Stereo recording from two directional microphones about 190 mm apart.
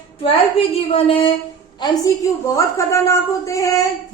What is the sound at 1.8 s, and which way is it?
A woman's voice, 15° left (ahead or behind).